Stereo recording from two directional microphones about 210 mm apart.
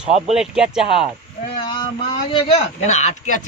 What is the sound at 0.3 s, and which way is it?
Speech, 5° right (ahead or behind).